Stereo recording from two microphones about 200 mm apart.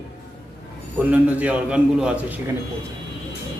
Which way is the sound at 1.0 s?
5° right (ahead or behind).